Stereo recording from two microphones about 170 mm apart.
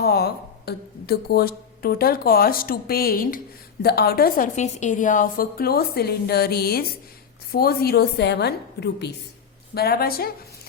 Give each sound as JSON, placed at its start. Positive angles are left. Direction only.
{"t": 0.0, "sound": "a woman's voice", "side_deg": 65}
{"t": 4.5, "sound": "a woman's voice", "side_deg": 45}
{"t": 9.7, "sound": "a woman's voice", "side_deg": 65}